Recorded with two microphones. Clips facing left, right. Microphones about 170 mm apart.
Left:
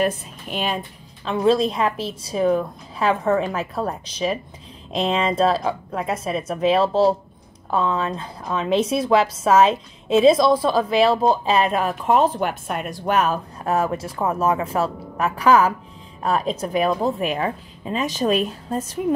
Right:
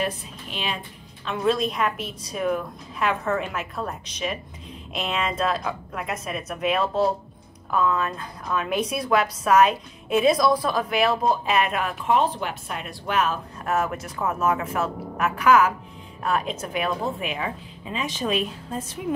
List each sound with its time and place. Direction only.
0.0 s speech: 45° left (ahead or behind)
1.2 s a woman's voice: 30° left (ahead or behind)